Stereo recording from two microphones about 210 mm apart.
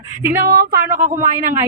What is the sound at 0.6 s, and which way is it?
Speech, 45° right (ahead or behind).